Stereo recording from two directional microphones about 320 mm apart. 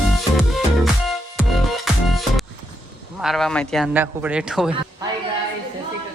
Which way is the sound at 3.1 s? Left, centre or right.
Centre.